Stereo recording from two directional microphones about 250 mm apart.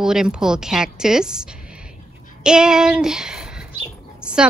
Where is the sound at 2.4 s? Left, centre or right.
Centre.